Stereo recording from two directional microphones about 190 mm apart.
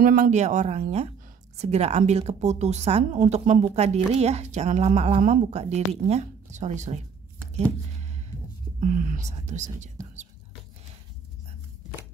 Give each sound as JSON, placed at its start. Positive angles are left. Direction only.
{"t": 0.0, "sound": "speech", "side_deg": -45}
{"t": 8.7, "sound": "speech", "side_deg": -45}